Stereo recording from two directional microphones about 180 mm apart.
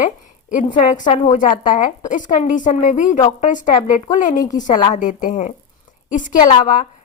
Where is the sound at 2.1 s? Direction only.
45° left (ahead or behind).